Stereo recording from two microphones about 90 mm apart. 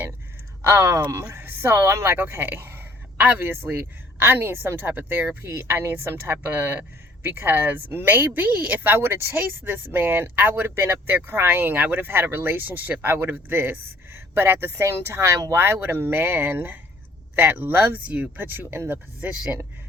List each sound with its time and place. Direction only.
0.6 s a woman's voice: 30° right (ahead or behind)